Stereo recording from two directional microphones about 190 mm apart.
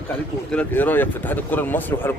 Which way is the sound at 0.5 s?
10° left (ahead or behind).